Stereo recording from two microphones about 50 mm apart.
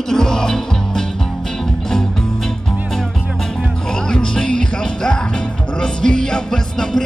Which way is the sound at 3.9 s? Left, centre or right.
Centre.